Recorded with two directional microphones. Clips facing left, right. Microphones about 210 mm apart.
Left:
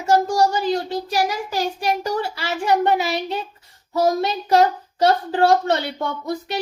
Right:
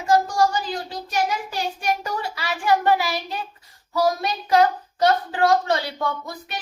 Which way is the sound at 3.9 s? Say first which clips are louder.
Left 3 dB; 25° left (ahead or behind).